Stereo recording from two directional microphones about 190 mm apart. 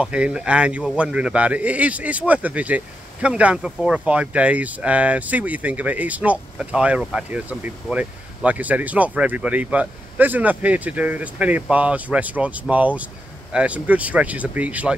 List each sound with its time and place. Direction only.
0.0 s speech: 5° right (ahead or behind)